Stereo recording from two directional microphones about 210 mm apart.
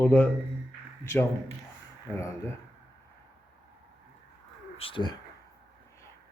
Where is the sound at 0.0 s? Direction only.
10° left (ahead or behind).